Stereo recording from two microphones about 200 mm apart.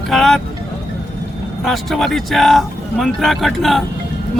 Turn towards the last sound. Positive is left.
turn(degrees=0)  # may be behind; listen again after turning